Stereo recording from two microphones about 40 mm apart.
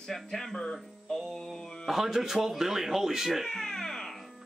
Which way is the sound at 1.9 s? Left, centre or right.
Centre.